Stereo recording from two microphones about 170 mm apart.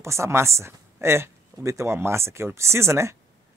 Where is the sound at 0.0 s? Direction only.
15° right (ahead or behind).